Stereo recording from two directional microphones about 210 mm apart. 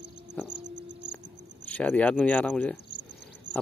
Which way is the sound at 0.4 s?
5° left (ahead or behind).